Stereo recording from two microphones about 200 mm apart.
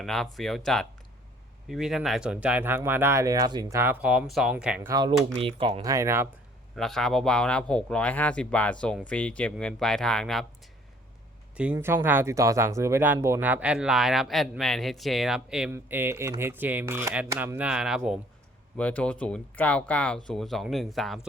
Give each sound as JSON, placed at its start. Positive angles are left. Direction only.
{"t": 0.0, "sound": "speech", "side_deg": 0}
{"t": 6.7, "sound": "speech", "side_deg": 0}
{"t": 11.5, "sound": "speech", "side_deg": -5}
{"t": 18.8, "sound": "speech", "side_deg": 5}